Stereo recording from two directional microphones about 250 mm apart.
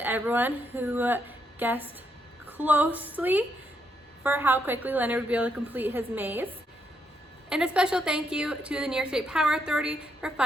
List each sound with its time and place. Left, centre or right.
0.0 s a woman's voice: centre
7.5 s a woman's voice: centre